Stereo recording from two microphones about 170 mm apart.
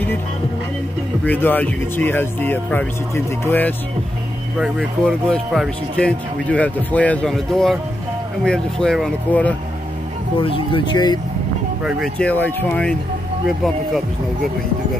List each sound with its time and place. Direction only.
1.2 s speech: 10° left (ahead or behind)
4.6 s speech: centre (ahead or behind)
10.4 s speech: 30° left (ahead or behind)
11.8 s speech: 5° left (ahead or behind)